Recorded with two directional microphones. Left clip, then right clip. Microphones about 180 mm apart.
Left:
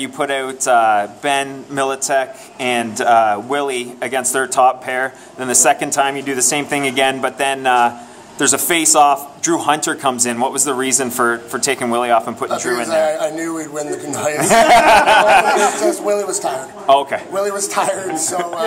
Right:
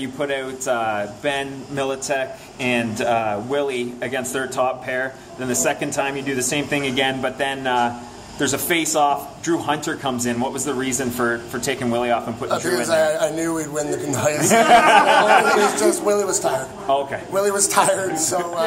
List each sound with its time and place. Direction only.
0.0 s speech: 45° left (ahead or behind)
12.4 s a man's voice: 5° left (ahead or behind)
14.4 s speech: 45° left (ahead or behind)
15.8 s speech: 5° left (ahead or behind)
16.8 s speech: 45° left (ahead or behind)
17.3 s a man's voice: centre (ahead or behind)